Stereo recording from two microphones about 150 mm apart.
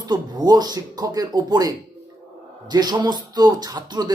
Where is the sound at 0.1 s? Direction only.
25° right (ahead or behind).